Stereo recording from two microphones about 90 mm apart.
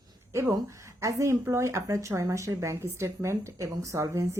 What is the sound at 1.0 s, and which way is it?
Speech, 35° right (ahead or behind).